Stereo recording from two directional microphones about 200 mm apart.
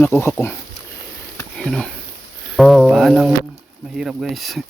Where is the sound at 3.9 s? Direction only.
5° right (ahead or behind).